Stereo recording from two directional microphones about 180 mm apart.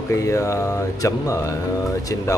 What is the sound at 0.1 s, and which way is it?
Speech, 15° left (ahead or behind).